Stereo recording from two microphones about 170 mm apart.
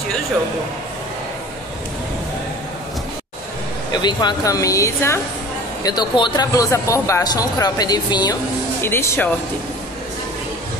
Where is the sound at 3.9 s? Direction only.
25° left (ahead or behind).